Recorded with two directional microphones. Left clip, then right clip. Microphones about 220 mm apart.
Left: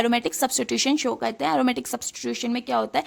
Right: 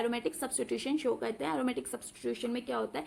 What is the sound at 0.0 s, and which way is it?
Speech, 55° left (ahead or behind).